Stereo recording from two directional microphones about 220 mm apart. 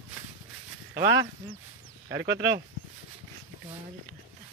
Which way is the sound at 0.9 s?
50° right (ahead or behind).